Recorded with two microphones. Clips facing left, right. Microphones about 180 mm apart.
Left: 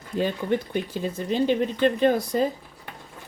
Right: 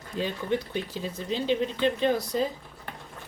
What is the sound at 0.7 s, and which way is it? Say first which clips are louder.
Speech: left 5 dB; 50° left (ahead or behind).